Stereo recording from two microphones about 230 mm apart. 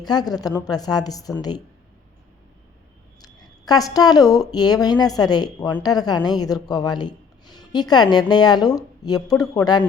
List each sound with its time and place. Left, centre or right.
0.0 s speech: centre
3.2 s a woman's voice: centre